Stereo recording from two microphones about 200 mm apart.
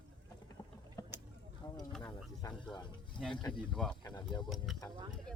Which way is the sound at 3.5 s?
5° left (ahead or behind).